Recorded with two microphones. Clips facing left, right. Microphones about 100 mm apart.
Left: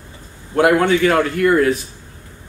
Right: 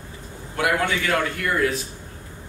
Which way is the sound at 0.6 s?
45° left (ahead or behind).